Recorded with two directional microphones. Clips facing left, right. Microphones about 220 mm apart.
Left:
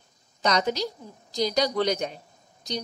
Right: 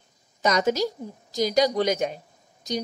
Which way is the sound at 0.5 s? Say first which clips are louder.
Right 3 dB; 45° right (ahead or behind).